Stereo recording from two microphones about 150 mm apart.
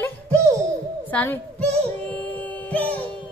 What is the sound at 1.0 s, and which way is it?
Music, 10° left (ahead or behind).